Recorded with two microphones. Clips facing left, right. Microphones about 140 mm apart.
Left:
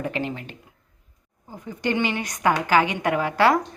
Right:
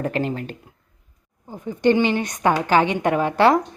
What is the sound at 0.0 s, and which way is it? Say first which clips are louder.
Speech: right 4 dB; 40° right (ahead or behind).